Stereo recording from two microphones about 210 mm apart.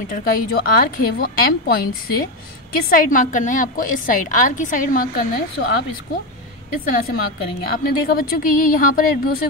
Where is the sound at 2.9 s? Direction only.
40° left (ahead or behind).